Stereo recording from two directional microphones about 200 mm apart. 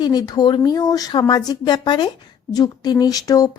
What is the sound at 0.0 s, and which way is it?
Speech, 20° left (ahead or behind).